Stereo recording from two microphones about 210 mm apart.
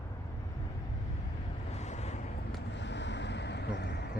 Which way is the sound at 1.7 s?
35° left (ahead or behind).